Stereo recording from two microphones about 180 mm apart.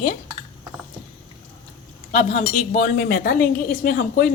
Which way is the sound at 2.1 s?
40° left (ahead or behind).